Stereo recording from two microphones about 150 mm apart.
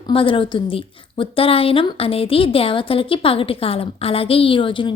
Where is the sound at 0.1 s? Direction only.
35° left (ahead or behind).